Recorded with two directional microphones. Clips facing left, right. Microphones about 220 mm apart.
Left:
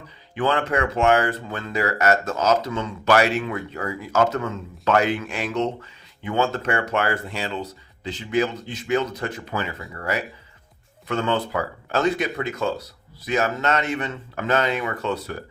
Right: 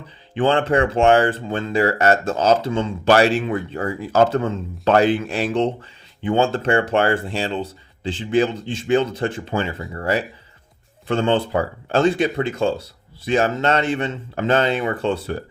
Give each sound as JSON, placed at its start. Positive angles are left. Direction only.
{"t": 0.3, "sound": "speech", "side_deg": -30}